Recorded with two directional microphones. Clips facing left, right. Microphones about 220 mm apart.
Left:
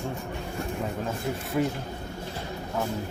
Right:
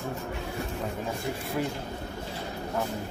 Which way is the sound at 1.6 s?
Centre (ahead or behind).